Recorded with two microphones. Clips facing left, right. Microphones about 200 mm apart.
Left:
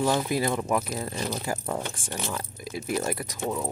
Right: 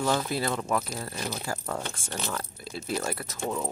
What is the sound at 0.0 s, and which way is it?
Speech, 15° left (ahead or behind).